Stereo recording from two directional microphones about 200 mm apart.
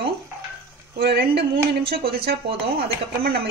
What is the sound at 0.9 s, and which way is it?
A woman's voice, 55° right (ahead or behind).